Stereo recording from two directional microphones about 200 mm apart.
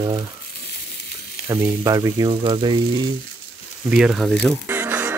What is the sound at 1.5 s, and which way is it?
Speech, 15° right (ahead or behind).